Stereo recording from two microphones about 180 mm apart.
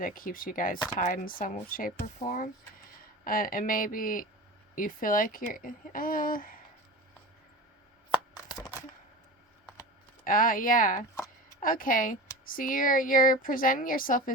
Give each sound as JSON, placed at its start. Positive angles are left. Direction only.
{"t": 0.0, "sound": "speech", "side_deg": 50}
{"t": 8.1, "sound": "coin", "side_deg": 25}
{"t": 10.2, "sound": "speech", "side_deg": 50}
{"t": 11.1, "sound": "a sound", "side_deg": 15}
{"t": 11.6, "sound": "speech", "side_deg": 50}